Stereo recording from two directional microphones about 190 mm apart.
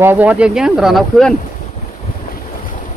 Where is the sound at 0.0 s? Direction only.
10° right (ahead or behind).